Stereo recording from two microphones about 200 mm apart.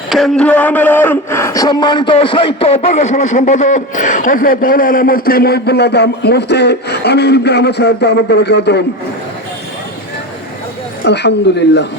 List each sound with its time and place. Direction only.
0.1 s speech: centre (ahead or behind); by 8.8 s 55° left (ahead or behind)
11.0 s speech: 60° left (ahead or behind)